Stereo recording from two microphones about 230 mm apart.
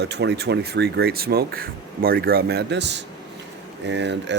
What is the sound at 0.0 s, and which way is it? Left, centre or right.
Speech, right.